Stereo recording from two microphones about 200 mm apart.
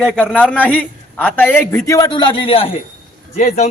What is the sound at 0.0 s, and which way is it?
A man's voice, 5° left (ahead or behind).